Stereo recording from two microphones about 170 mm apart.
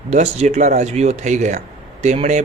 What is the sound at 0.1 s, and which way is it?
A man's voice, 40° right (ahead or behind).